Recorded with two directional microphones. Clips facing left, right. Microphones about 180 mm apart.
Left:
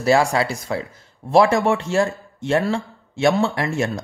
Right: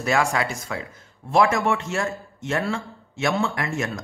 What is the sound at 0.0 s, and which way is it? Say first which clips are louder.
A man's voice: left 5 dB; 30° left (ahead or behind).